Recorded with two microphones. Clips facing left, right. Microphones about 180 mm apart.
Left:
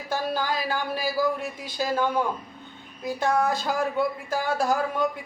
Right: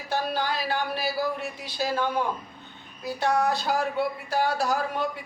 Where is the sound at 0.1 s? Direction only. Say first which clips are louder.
Left 1 dB; 45° left (ahead or behind).